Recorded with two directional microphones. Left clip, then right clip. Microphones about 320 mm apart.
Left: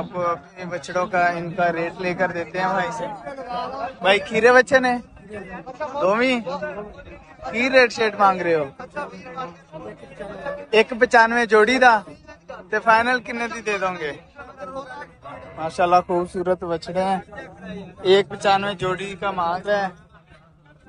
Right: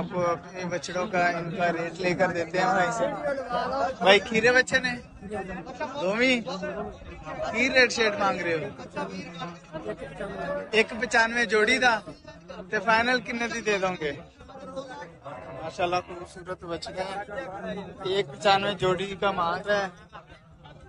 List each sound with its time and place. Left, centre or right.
0.0 s a man's voice: centre
3.4 s a man's voice: centre
4.0 s a man's voice: centre
5.3 s a man's voice: centre
6.0 s a man's voice: centre
6.4 s a man's voice: centre
7.5 s a man's voice: centre
8.6 s a man's voice: centre
11.0 s a man's voice: centre
14.6 s a sound: centre
15.6 s a man's voice: centre
17.4 s a man's voice: right
18.1 s a man's voice: centre